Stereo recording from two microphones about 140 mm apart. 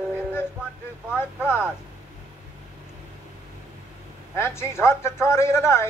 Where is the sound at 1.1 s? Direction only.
15° left (ahead or behind).